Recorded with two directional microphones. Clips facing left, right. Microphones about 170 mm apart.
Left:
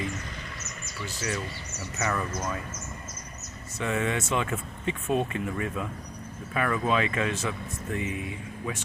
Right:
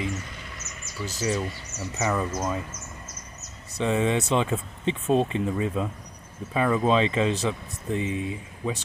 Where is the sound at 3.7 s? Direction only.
25° right (ahead or behind).